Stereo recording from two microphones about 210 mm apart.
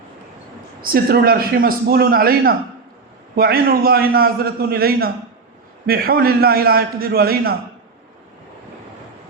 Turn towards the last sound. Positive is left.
turn(degrees=-45)  # may be behind; listen again after turning